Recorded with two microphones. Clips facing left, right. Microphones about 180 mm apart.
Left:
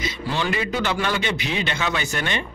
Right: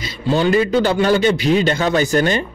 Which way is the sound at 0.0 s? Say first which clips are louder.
Right 8 dB; 35° right (ahead or behind).